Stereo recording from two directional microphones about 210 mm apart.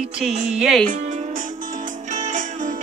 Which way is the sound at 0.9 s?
35° right (ahead or behind).